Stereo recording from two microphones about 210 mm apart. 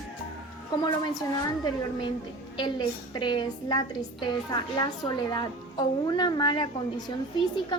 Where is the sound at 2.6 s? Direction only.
20° left (ahead or behind).